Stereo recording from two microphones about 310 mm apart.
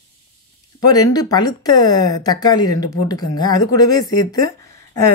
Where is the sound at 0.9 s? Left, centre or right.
Centre.